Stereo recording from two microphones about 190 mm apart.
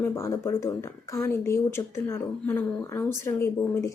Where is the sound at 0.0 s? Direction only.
15° left (ahead or behind).